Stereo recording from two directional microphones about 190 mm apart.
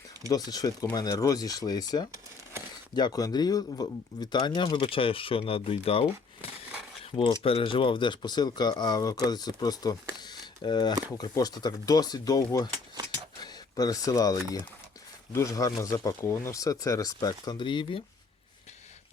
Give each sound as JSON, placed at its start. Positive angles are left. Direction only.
{"t": 0.3, "sound": "speech", "side_deg": 20}
{"t": 7.0, "sound": "keys jangling", "side_deg": 30}
{"t": 7.4, "sound": "speech", "side_deg": 30}